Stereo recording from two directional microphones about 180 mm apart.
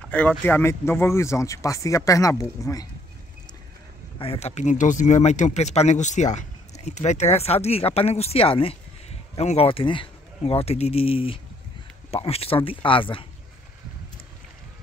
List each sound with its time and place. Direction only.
0.1 s speech: 10° left (ahead or behind)
4.2 s speech: 35° left (ahead or behind)